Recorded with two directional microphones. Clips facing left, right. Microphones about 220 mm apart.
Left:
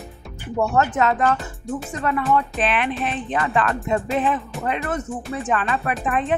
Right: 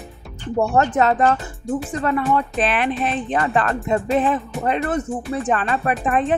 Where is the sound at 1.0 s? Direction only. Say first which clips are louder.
Right 3 dB; 35° right (ahead or behind).